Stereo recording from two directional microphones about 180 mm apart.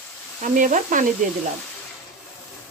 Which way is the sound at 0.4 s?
45° right (ahead or behind).